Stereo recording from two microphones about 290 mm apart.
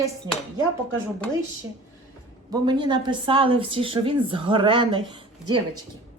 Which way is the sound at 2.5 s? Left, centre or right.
Centre.